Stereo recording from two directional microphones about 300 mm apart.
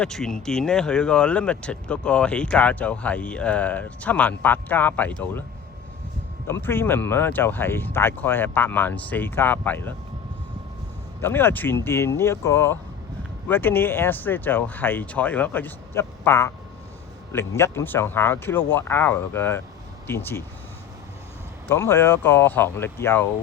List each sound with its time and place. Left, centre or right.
0.0 s speech: centre
6.5 s speech: centre
11.2 s speech: centre
21.7 s speech: centre